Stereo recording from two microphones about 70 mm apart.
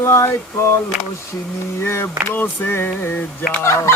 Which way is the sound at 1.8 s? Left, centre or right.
Left.